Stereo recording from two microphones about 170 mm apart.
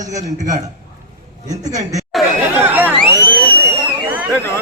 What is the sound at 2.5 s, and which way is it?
Chatter, 10° right (ahead or behind).